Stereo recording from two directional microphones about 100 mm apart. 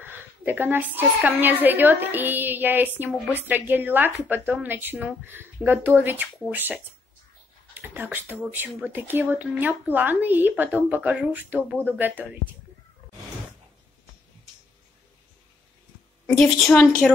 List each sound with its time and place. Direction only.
0.0 s a woman's voice: 20° right (ahead or behind)
16.3 s a woman's voice: 5° left (ahead or behind)